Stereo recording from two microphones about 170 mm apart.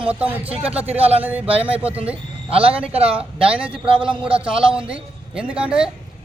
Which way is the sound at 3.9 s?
30° right (ahead or behind).